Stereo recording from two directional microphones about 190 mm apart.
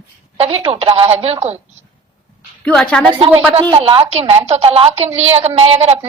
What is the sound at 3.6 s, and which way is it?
A woman's voice, 20° right (ahead or behind).